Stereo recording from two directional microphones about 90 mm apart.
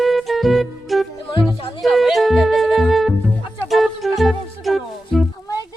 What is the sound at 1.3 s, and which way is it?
Music, 75° left (ahead or behind).